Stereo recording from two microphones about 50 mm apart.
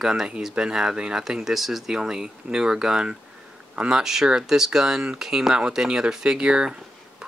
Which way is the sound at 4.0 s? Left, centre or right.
Centre.